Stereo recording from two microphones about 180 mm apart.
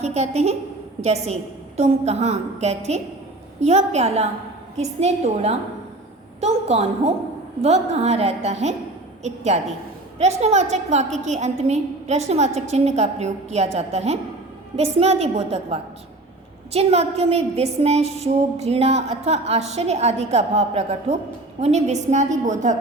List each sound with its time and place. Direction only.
0.0 s a woman's voice: 35° right (ahead or behind)